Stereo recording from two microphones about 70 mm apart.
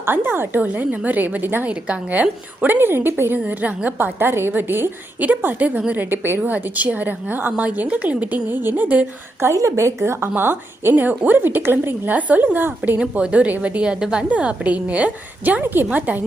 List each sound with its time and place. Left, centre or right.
0.0 s a woman's voice: right
3.4 s a woman's voice: right
9.5 s a woman's voice: right
13.0 s a woman's voice: centre